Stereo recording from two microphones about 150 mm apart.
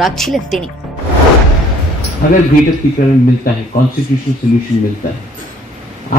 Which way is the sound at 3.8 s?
70° left (ahead or behind).